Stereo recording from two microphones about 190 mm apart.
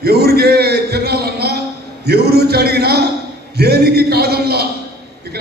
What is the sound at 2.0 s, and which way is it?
A woman's voice, 60° right (ahead or behind).